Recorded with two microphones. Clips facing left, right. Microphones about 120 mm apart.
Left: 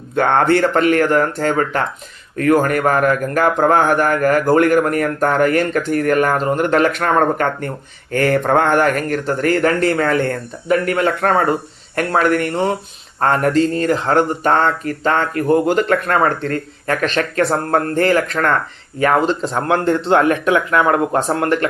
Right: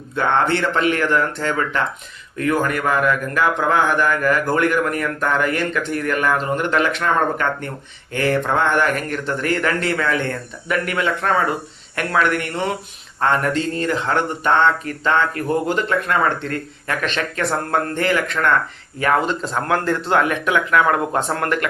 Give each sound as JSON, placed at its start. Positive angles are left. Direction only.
{"t": 0.2, "sound": "a man's voice", "side_deg": 50}
{"t": 20.1, "sound": "speech", "side_deg": 35}